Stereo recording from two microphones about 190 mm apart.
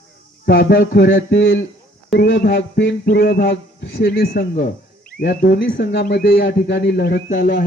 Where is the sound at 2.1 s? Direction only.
65° left (ahead or behind).